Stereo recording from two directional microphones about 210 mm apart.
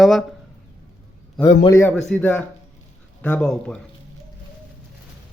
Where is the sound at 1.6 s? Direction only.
15° left (ahead or behind).